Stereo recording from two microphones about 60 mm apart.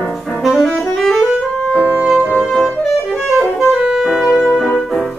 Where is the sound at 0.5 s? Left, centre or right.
Centre.